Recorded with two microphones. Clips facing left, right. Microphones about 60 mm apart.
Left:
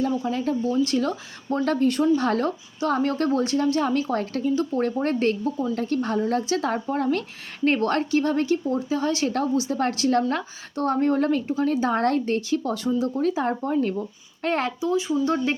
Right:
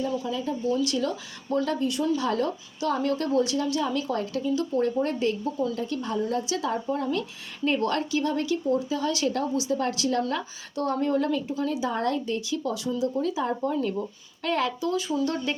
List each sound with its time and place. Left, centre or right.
0.3 s speech: left
0.7 s a woman's voice: left
1.6 s a woman's voice: left
14.8 s speech: left